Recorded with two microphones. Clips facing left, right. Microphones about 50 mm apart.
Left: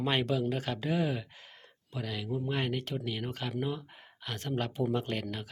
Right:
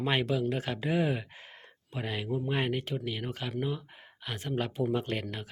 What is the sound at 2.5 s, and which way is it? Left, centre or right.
Speech, centre.